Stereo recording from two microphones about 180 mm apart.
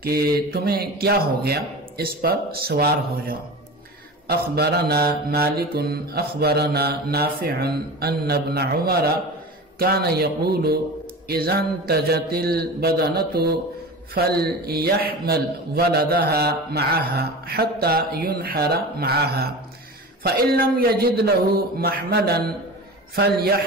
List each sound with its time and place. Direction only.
0.0 s mantra: 60° right (ahead or behind)